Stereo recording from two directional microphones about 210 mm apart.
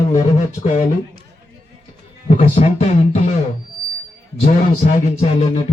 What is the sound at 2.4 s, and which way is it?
Speech, 30° left (ahead or behind).